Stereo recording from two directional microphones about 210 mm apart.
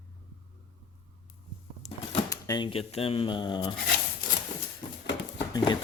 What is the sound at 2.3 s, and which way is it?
Speech, 20° left (ahead or behind).